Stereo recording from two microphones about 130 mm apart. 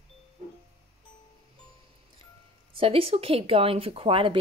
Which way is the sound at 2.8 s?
45° right (ahead or behind).